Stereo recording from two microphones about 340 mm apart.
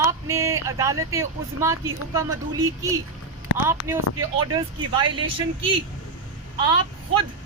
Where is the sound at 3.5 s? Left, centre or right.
Left.